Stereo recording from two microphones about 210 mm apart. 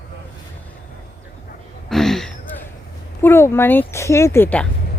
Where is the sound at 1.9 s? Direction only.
Centre (ahead or behind).